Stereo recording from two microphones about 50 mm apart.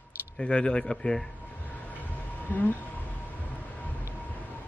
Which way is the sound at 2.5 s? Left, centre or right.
Left.